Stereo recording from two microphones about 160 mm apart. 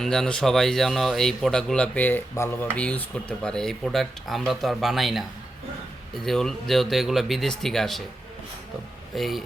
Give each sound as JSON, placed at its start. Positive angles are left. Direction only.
{"t": 0.0, "sound": "speech", "side_deg": 5}
{"t": 6.2, "sound": "speech", "side_deg": 5}
{"t": 9.1, "sound": "speech", "side_deg": 0}